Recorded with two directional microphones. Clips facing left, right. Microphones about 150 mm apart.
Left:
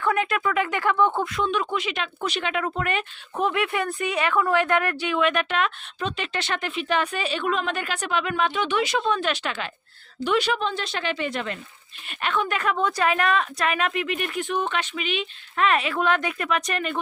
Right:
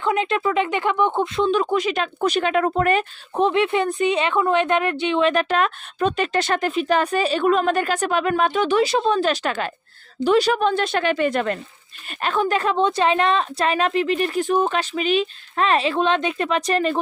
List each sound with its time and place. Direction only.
0.0 s speech: 20° right (ahead or behind); by 10.6 s 40° right (ahead or behind)
10.6 s speech: 55° right (ahead or behind)
12.0 s speech: 35° right (ahead or behind)